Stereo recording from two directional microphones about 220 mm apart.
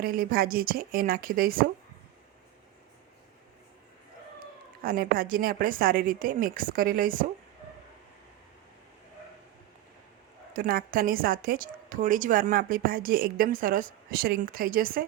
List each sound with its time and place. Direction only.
0.0 s a woman's voice: 40° right (ahead or behind)
4.8 s a woman's voice: 40° right (ahead or behind)
10.5 s a woman's voice: 40° right (ahead or behind)